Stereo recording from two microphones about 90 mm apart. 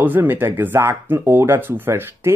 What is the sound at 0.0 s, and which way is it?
Speech, 20° right (ahead or behind).